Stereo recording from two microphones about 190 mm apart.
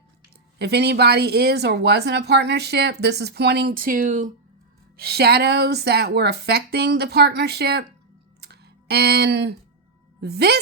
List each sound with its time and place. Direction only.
0.6 s speech: 60° right (ahead or behind); by 4.3 s 40° right (ahead or behind)
4.9 s speech: 55° right (ahead or behind)
8.4 s clicking: 60° right (ahead or behind)
10.2 s speech: 60° right (ahead or behind)